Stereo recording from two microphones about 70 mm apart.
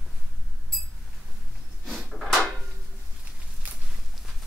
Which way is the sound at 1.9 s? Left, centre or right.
Centre.